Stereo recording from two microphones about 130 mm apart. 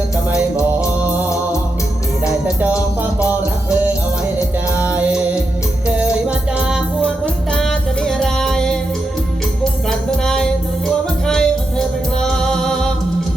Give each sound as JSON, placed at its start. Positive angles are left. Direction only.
{"t": 2.6, "sound": "music", "side_deg": -15}
{"t": 4.8, "sound": "music", "side_deg": -10}
{"t": 10.2, "sound": "music", "side_deg": 5}